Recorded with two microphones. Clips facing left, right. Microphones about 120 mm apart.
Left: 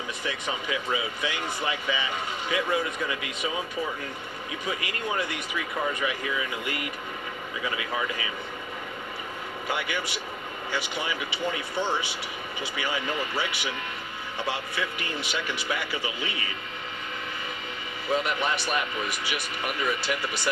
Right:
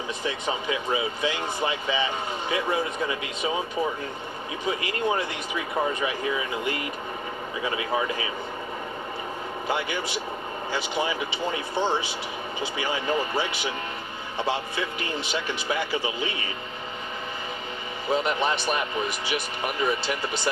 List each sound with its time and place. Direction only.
0.3 s speech: 25° right (ahead or behind)
4.6 s speech: 25° right (ahead or behind)
9.6 s speech: 25° right (ahead or behind)
18.1 s speech: 25° right (ahead or behind)